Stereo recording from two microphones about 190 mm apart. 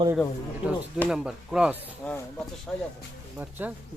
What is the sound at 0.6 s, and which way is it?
Speech, 5° right (ahead or behind).